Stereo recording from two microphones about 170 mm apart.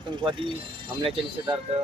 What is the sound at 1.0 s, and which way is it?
Speech, 30° right (ahead or behind).